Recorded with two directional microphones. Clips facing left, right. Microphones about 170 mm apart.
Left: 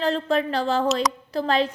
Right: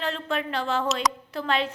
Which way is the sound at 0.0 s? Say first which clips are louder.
Left 6 dB; 35° left (ahead or behind).